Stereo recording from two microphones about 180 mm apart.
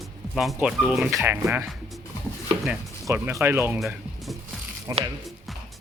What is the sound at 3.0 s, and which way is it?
Speech, 15° right (ahead or behind).